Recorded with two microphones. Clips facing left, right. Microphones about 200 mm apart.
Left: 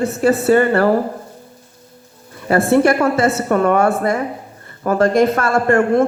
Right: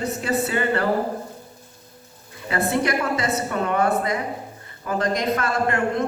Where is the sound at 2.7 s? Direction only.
50° left (ahead or behind).